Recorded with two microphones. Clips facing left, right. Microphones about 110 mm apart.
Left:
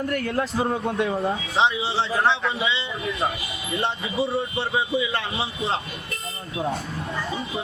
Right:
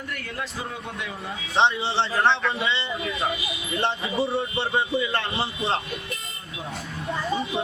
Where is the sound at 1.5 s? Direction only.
5° left (ahead or behind).